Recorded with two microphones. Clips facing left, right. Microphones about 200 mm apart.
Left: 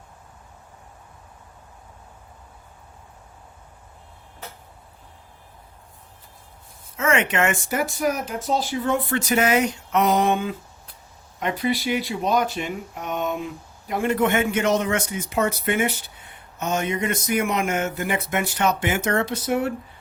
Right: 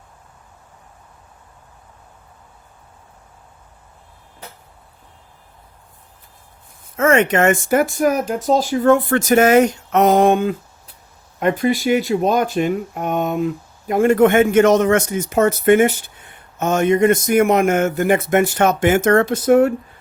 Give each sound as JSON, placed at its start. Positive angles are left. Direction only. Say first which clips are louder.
{"t": 6.9, "sound": "speech", "louder": "right 7 dB", "side_deg": -45}